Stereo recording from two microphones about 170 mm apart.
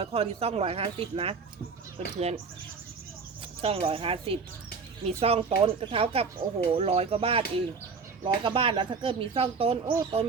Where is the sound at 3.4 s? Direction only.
35° right (ahead or behind).